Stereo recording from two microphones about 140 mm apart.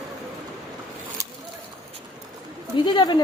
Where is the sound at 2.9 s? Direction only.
30° left (ahead or behind).